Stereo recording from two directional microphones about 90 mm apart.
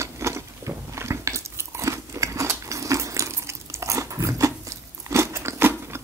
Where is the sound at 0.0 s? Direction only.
30° right (ahead or behind).